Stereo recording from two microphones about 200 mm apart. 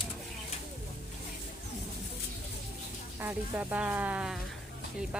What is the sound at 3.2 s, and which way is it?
Speech, 10° right (ahead or behind).